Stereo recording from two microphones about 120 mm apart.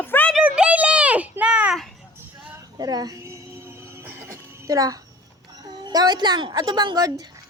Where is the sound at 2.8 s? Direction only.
35° right (ahead or behind).